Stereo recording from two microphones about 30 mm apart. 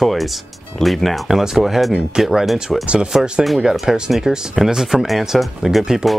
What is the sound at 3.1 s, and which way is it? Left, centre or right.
Speech, right.